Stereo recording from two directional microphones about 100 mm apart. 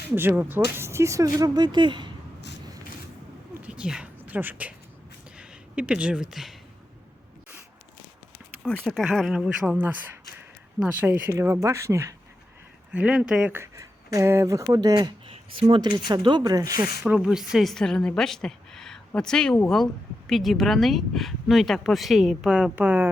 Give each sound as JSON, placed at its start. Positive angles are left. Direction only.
{"t": 0.2, "sound": "speech", "side_deg": -20}
{"t": 3.6, "sound": "a sound", "side_deg": -10}
{"t": 4.2, "sound": "speech", "side_deg": -20}
{"t": 8.6, "sound": "a woman's voice", "side_deg": 0}
{"t": 11.0, "sound": "speech", "side_deg": -25}
{"t": 12.9, "sound": "speech", "side_deg": -15}
{"t": 13.5, "sound": "speech", "side_deg": -30}
{"t": 16.4, "sound": "speech", "side_deg": -35}
{"t": 17.2, "sound": "a woman's voice", "side_deg": -5}